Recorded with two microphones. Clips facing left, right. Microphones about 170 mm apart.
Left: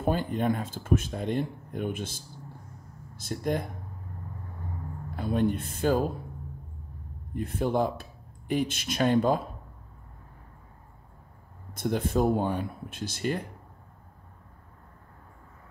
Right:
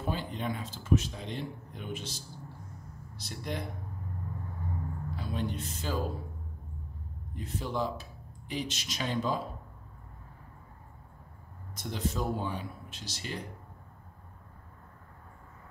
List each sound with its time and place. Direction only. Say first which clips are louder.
0.0 s speech: left 8 dB; 50° left (ahead or behind)
5.1 s speech: left 10 dB; 55° left (ahead or behind)
7.3 s speech: left 7 dB; 55° left (ahead or behind)
11.7 s speech: left 8 dB; 55° left (ahead or behind)